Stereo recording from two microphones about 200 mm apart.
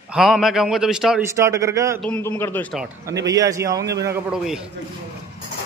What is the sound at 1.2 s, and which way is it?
Speech, 15° right (ahead or behind).